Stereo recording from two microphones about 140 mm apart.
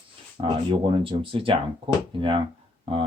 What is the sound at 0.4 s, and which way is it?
Speech, 40° right (ahead or behind).